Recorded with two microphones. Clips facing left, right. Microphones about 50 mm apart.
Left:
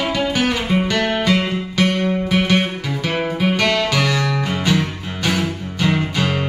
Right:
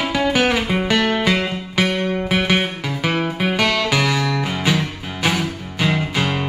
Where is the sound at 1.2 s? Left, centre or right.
Centre.